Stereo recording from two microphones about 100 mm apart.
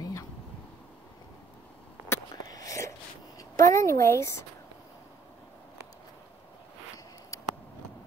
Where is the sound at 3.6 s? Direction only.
30° left (ahead or behind).